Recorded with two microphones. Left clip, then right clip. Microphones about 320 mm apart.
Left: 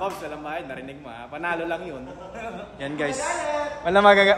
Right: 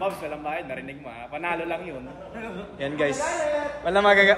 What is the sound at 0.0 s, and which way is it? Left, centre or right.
Mantra, centre.